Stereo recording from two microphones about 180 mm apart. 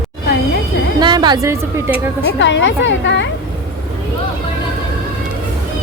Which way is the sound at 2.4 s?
90° left.